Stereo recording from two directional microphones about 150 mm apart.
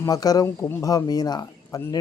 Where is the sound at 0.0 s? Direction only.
25° left (ahead or behind).